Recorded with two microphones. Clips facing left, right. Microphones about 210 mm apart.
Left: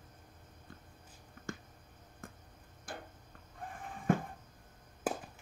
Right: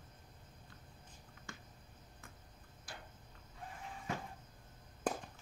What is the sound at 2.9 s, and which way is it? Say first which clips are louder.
Tick-tock: left 8 dB; 50° left (ahead or behind).